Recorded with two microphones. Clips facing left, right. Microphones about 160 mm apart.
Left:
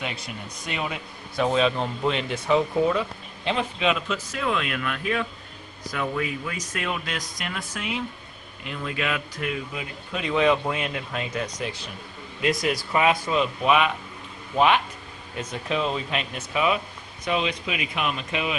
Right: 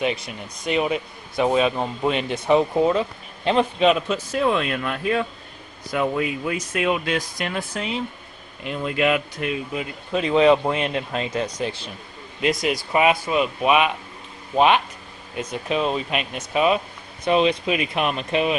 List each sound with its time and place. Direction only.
0.7 s a man's voice: 20° right (ahead or behind)
3.4 s a man's voice: 40° right (ahead or behind)
12.4 s a man's voice: 20° right (ahead or behind); by 18.5 s 40° right (ahead or behind)